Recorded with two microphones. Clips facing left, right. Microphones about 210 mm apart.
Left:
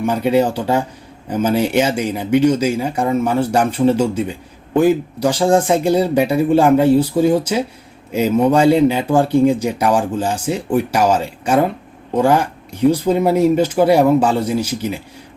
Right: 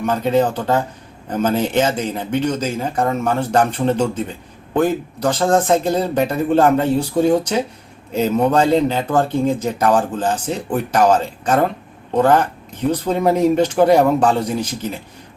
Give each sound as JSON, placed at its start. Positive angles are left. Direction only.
{"t": 0.0, "sound": "speech", "side_deg": 10}